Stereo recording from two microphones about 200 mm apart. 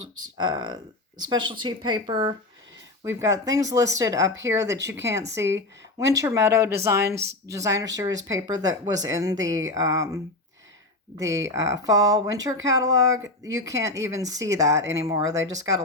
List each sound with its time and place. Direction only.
0.3 s speech: 20° right (ahead or behind)
11.2 s speech: 15° right (ahead or behind)